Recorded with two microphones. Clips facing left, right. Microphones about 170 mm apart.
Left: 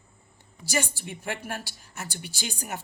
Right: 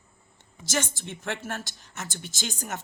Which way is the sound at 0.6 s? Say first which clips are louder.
Even; 10° left (ahead or behind).